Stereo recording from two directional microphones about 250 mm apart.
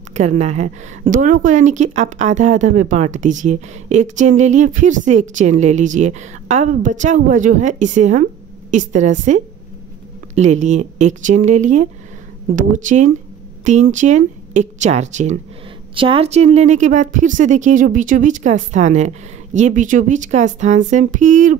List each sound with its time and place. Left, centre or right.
0.1 s a woman's voice: right